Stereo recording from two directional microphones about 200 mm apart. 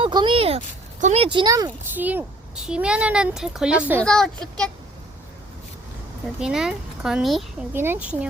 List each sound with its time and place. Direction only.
0.0 s speech: 25° right (ahead or behind); by 4.0 s 5° right (ahead or behind)
4.0 s speech: 5° left (ahead or behind)
6.4 s speech: 5° right (ahead or behind)